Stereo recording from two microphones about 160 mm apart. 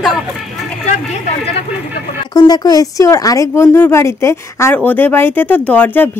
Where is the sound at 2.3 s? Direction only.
25° left (ahead or behind).